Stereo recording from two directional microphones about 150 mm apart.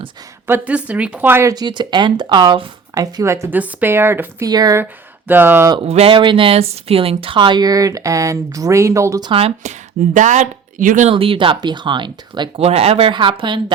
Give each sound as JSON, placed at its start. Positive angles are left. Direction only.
{"t": 0.4, "sound": "speech", "side_deg": -10}
{"t": 5.3, "sound": "speech", "side_deg": -15}
{"t": 5.8, "sound": "speech", "side_deg": -40}
{"t": 9.3, "sound": "speech", "side_deg": -40}
{"t": 10.2, "sound": "speech", "side_deg": -55}
{"t": 11.1, "sound": "speech", "side_deg": -35}
{"t": 12.5, "sound": "speech", "side_deg": -45}